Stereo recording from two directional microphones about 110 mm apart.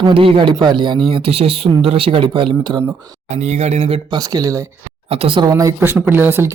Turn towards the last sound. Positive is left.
turn(degrees=-20)  # may be behind; listen again after turning